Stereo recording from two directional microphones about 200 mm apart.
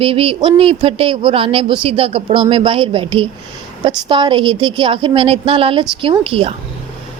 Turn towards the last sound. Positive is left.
turn(degrees=-25)  # may be behind; listen again after turning